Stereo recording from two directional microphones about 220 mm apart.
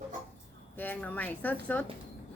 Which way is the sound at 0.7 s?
10° left (ahead or behind).